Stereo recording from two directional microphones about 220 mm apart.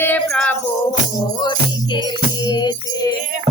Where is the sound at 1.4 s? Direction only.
20° left (ahead or behind).